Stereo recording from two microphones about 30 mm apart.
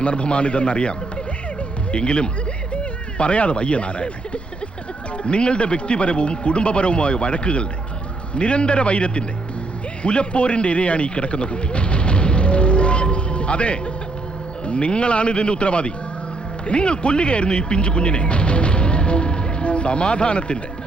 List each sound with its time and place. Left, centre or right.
0.0 s speech: left
5.1 s a man's voice: left